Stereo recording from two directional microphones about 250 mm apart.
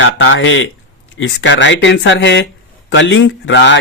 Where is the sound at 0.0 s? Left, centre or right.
Left.